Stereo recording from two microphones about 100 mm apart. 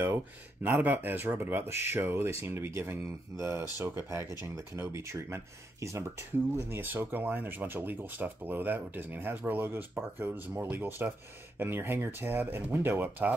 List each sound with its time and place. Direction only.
0.8 s speech: 20° right (ahead or behind)